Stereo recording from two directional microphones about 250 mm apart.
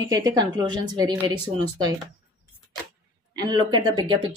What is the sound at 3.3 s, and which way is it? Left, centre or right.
Speech, centre.